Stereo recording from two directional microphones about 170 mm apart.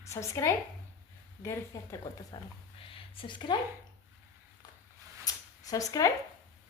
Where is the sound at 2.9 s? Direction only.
30° left (ahead or behind).